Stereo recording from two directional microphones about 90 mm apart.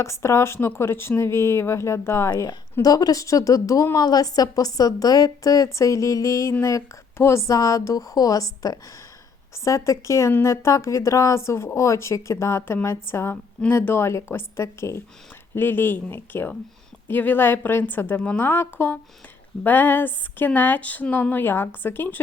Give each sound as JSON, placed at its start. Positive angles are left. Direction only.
{"t": 0.0, "sound": "speech", "side_deg": 30}
{"t": 2.8, "sound": "a woman's voice", "side_deg": 45}